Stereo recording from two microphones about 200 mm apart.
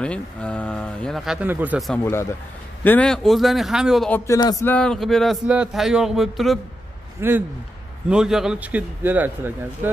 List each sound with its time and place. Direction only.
0.0 s speech: 5° left (ahead or behind)
2.8 s speech: 10° left (ahead or behind)
4.3 s a man's voice: 20° left (ahead or behind)
4.6 s speech: 5° left (ahead or behind)
7.2 s a man's voice: 10° right (ahead or behind)